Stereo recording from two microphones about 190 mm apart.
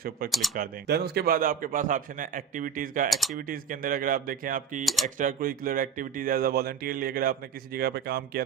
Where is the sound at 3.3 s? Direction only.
50° right (ahead or behind).